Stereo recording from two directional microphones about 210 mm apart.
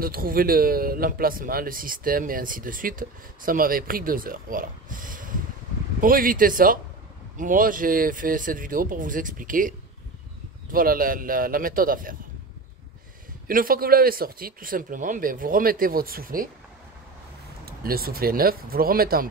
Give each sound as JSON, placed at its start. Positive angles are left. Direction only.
{"t": 0.0, "sound": "speech", "side_deg": -45}
{"t": 13.5, "sound": "speech", "side_deg": -40}
{"t": 17.6, "sound": "speech", "side_deg": -45}